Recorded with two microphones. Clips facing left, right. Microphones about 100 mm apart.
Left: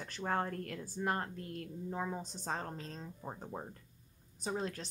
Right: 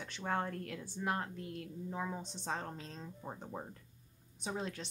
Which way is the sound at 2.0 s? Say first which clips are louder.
Left 1 dB; 5° left (ahead or behind).